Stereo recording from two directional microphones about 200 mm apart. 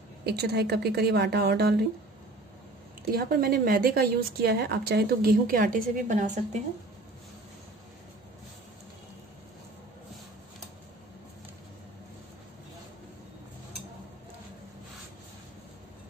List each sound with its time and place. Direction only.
0.2 s a woman's voice: 55° right (ahead or behind)
3.1 s a woman's voice: 50° right (ahead or behind)